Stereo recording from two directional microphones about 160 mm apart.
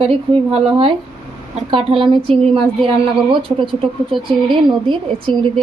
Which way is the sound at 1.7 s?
35° right (ahead or behind).